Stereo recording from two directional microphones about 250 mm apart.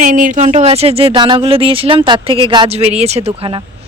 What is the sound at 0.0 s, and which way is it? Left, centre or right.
Speech, right.